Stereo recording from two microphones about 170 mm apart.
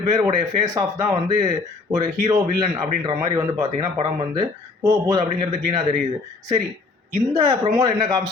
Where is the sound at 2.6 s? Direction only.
25° right (ahead or behind).